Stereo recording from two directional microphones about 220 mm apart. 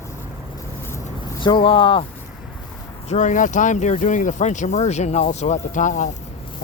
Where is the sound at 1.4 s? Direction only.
25° left (ahead or behind).